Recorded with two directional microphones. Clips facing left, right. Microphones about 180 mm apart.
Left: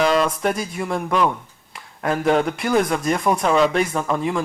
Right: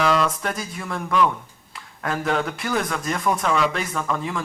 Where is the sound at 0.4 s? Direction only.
25° left (ahead or behind).